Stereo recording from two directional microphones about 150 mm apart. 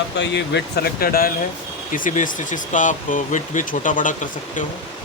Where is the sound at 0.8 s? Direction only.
85° left.